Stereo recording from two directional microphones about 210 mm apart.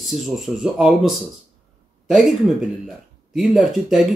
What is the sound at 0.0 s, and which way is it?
Speech, centre (ahead or behind).